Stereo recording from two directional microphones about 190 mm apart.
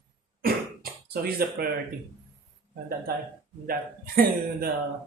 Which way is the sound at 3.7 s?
50° right (ahead or behind).